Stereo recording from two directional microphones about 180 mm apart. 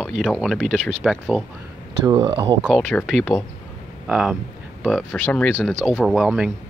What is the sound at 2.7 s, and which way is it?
Speech, 5° left (ahead or behind).